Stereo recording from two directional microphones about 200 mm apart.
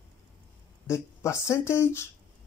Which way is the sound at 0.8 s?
15° left (ahead or behind).